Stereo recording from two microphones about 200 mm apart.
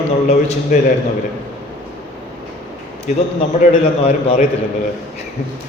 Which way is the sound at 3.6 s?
40° left (ahead or behind).